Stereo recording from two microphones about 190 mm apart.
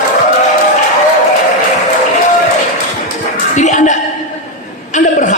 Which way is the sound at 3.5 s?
40° left (ahead or behind).